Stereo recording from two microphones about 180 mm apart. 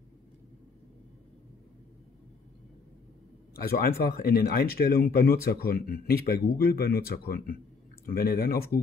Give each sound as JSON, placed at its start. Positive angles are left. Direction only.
{"t": 3.5, "sound": "speech", "side_deg": 55}